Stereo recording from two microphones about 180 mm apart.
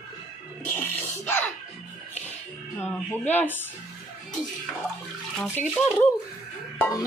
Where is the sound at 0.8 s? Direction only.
10° left (ahead or behind).